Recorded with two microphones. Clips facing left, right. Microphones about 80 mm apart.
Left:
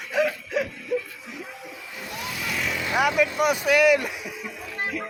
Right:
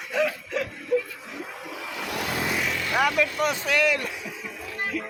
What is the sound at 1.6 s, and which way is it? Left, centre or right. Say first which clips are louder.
Vehicle: right 4 dB; right.